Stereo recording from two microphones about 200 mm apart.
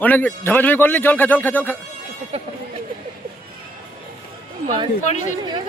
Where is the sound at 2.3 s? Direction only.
30° right (ahead or behind).